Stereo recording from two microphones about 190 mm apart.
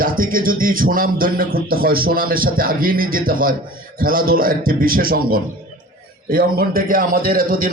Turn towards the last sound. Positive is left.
turn(degrees=-50)  # may be behind; listen again after turning